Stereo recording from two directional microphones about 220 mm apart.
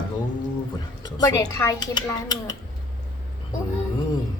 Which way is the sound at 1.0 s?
15° left (ahead or behind).